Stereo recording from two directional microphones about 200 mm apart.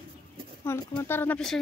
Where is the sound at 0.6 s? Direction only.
10° left (ahead or behind).